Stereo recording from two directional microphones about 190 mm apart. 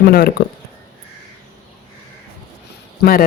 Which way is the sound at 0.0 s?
55° left (ahead or behind).